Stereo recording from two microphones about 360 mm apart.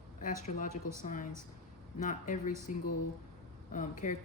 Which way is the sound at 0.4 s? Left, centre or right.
Left.